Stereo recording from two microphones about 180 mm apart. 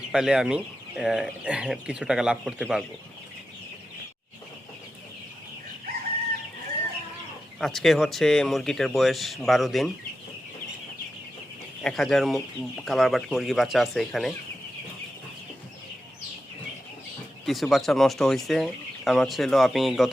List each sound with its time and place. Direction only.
0.1 s speech: 5° right (ahead or behind)
7.6 s speech: centre (ahead or behind)
11.8 s speech: 5° left (ahead or behind)
17.4 s speech: centre (ahead or behind)